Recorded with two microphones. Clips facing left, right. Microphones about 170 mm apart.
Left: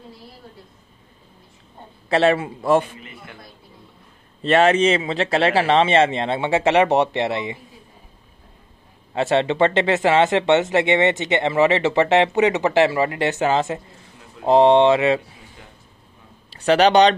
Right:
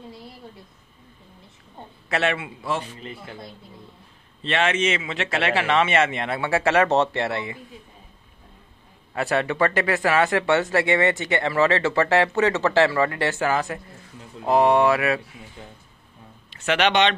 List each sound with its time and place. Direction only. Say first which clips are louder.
2.0 s a man's voice: left 7 dB; 30° left (ahead or behind)
3.0 s a man's voice: right 4 dB; 30° right (ahead or behind)
4.4 s speech: left 7 dB; 40° left (ahead or behind); by 7.6 s 20° left (ahead or behind)
9.1 s speech: left 5 dB; 25° left (ahead or behind)
16.4 s a man's voice: left 6 dB; 35° left (ahead or behind)